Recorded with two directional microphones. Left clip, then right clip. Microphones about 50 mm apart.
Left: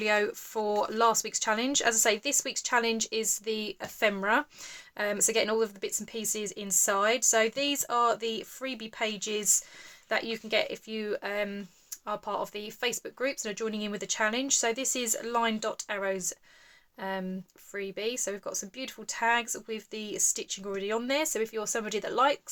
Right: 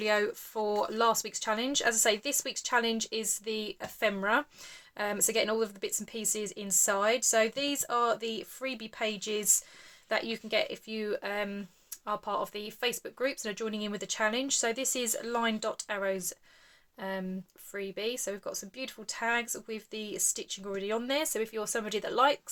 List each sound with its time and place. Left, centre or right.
0.0 s speech: left